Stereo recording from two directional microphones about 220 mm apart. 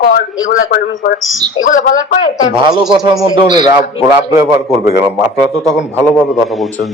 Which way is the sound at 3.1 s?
20° right (ahead or behind).